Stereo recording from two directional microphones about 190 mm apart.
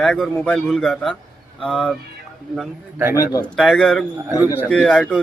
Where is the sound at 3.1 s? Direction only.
20° left (ahead or behind).